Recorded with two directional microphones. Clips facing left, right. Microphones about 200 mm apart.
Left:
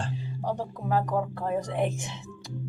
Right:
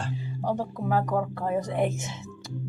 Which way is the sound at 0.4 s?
5° right (ahead or behind).